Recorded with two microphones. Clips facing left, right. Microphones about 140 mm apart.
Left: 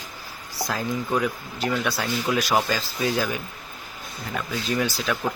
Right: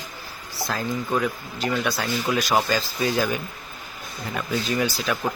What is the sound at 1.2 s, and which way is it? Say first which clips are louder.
Speech: even; 5° left (ahead or behind).